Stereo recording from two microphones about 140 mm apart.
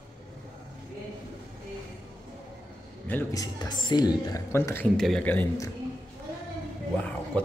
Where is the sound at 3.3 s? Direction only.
25° left (ahead or behind).